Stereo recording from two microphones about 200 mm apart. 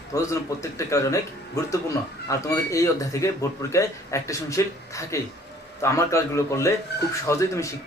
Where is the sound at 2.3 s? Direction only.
15° left (ahead or behind).